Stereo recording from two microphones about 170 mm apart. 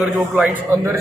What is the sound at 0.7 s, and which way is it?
Speech, 15° right (ahead or behind).